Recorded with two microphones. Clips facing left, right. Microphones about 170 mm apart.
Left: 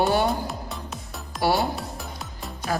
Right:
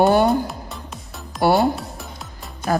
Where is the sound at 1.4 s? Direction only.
55° right (ahead or behind).